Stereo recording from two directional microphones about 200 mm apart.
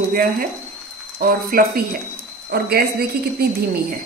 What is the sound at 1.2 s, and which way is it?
A woman's voice, 45° right (ahead or behind).